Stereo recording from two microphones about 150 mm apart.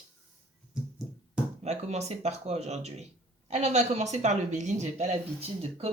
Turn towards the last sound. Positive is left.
turn(degrees=-40)  # may be behind; listen again after turning